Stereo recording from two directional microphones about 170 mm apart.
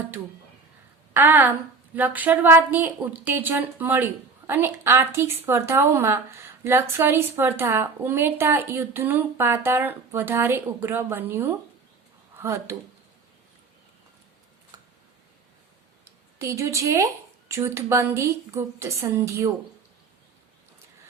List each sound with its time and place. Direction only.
1.1 s a woman's voice: 10° right (ahead or behind)
16.4 s a woman's voice: 15° right (ahead or behind)